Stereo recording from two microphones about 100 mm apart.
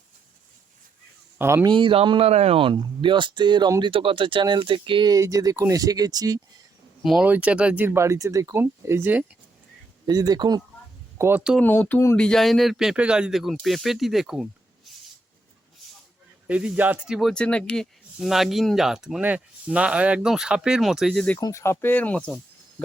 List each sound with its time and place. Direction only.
1.4 s speech: 25° right (ahead or behind)
1.6 s speech: 60° right (ahead or behind)
5.1 s speech: 35° right (ahead or behind)
7.2 s speech: 15° right (ahead or behind)
7.9 s speech: 30° right (ahead or behind)
10.1 s speech: 40° right (ahead or behind)
11.2 s speech: 20° right (ahead or behind)
11.6 s speech: 20° left (ahead or behind)
12.1 s speech: 10° left (ahead or behind)
16.5 s speech: 15° right (ahead or behind)
17.1 s speech: centre (ahead or behind)
21.3 s speech: 40° left (ahead or behind)
21.6 s speech: 25° left (ahead or behind)